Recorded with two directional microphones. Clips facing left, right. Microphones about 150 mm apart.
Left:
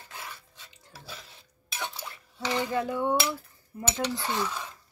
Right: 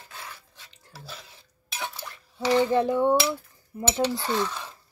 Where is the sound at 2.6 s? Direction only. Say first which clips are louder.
Right 5 dB; 25° right (ahead or behind).